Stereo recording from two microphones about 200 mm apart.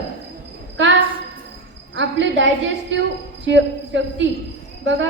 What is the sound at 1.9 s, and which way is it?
A woman's voice, 65° right (ahead or behind).